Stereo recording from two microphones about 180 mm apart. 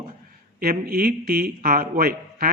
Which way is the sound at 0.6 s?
55° right (ahead or behind).